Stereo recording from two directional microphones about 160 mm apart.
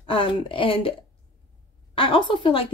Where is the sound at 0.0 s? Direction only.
30° left (ahead or behind).